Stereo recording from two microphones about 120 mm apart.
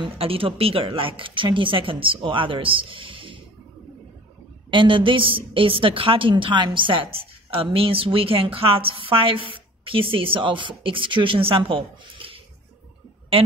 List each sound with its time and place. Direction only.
0.0 s a woman's voice: 50° right (ahead or behind)
4.6 s a woman's voice: 45° right (ahead or behind)